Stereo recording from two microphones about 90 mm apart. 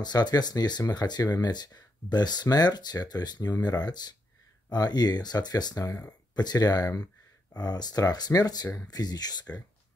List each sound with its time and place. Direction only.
0.0 s speech: 50° left (ahead or behind)